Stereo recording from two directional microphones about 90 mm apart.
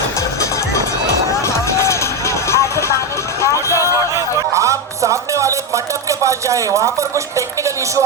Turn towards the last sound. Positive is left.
turn(degrees=-35)  # may be behind; listen again after turning